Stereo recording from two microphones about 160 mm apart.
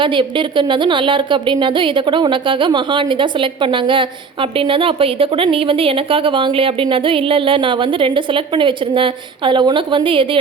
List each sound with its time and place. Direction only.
0.0 s a woman's voice: 30° right (ahead or behind)